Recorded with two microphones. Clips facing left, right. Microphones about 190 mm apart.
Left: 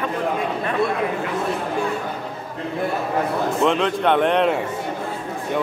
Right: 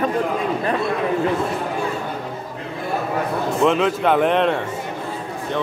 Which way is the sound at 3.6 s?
5° right (ahead or behind).